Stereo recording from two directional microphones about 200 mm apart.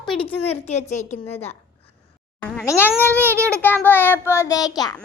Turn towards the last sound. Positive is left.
turn(degrees=20)  # may be behind; listen again after turning